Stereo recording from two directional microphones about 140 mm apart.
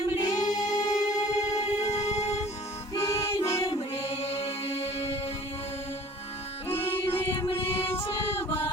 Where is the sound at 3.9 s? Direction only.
45° left (ahead or behind).